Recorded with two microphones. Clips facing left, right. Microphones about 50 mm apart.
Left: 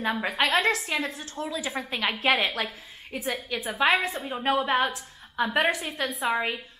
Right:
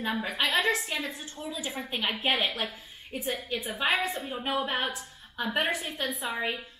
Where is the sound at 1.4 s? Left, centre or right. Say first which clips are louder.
Left 6 dB; left.